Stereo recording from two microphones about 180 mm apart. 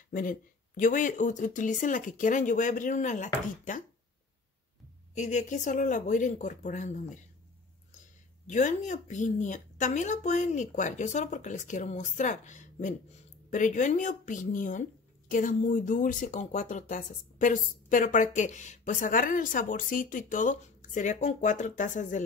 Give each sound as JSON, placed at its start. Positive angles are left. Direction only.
{"t": 0.1, "sound": "speech", "side_deg": 50}
{"t": 5.1, "sound": "speech", "side_deg": 40}
{"t": 8.5, "sound": "speech", "side_deg": 45}